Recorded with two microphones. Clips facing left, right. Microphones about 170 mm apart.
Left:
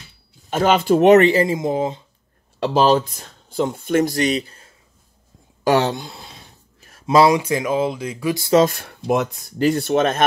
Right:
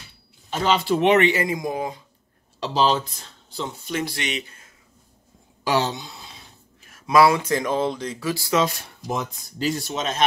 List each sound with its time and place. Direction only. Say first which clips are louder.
0.5 s speech: left 5 dB; 50° left (ahead or behind); by 2.0 s 25° left (ahead or behind)
2.6 s speech: left 5 dB; 50° left (ahead or behind); by 4.7 s 35° left (ahead or behind)
5.6 s speech: left 5 dB; 55° left (ahead or behind)
6.8 s a sound: left 2 dB; 35° left (ahead or behind)
7.3 s speech: left 3 dB; 10° left (ahead or behind)
8.6 s speech: left 7 dB; 55° left (ahead or behind)